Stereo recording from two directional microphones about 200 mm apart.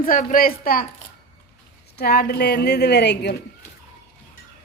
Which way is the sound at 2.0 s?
50° left (ahead or behind).